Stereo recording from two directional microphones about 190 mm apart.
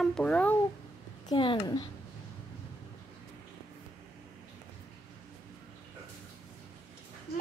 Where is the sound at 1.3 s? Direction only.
25° left (ahead or behind).